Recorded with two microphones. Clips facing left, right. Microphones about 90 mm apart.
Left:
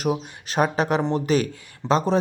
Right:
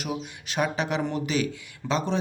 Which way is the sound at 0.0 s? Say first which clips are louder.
Left 7 dB; 40° left (ahead or behind).